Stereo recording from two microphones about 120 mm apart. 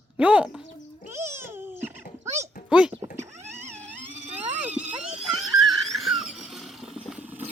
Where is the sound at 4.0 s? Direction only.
15° right (ahead or behind).